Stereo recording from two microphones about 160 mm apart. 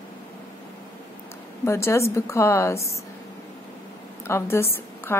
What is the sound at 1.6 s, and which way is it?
A woman's voice, 15° left (ahead or behind).